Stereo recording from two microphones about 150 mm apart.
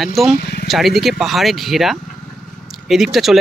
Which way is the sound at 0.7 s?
Centre (ahead or behind).